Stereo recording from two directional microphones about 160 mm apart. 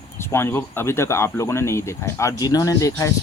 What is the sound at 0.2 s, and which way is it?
Speech, 15° left (ahead or behind).